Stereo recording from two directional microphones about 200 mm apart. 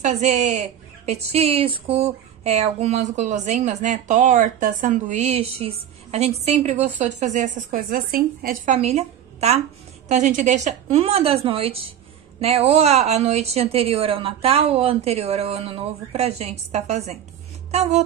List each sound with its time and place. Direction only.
0.0 s speech: 35° right (ahead or behind)
8.7 s a woman's voice: 30° right (ahead or behind)
17.6 s a sound: 35° right (ahead or behind)